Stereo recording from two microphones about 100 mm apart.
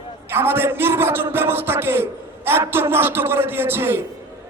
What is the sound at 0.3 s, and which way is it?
A man's voice, 25° right (ahead or behind).